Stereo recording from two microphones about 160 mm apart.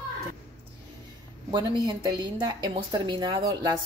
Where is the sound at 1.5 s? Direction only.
30° right (ahead or behind).